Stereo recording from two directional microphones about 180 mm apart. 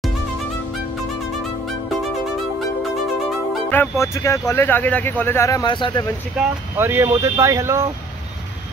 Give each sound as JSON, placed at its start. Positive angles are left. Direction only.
{"t": 3.7, "sound": "speech", "side_deg": 15}
{"t": 6.8, "sound": "speech", "side_deg": -15}